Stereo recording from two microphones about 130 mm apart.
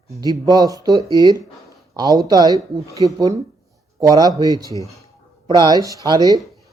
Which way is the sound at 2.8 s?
25° left (ahead or behind).